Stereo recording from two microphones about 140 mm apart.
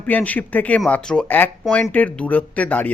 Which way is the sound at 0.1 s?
10° left (ahead or behind).